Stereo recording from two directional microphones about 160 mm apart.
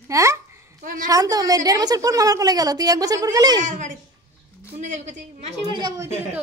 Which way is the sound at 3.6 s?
50° right (ahead or behind).